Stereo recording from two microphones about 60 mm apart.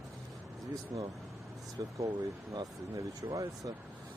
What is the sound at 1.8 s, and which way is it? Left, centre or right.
Speech, right.